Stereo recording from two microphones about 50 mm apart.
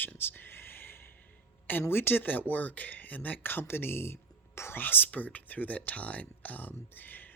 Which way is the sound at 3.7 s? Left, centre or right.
Left.